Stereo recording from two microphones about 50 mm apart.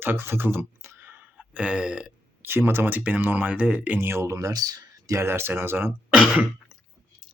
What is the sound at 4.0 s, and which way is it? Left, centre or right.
Speech, right.